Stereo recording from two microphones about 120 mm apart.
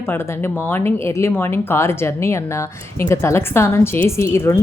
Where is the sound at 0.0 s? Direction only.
20° left (ahead or behind).